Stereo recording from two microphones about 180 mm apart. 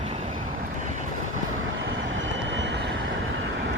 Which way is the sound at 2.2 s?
85° right.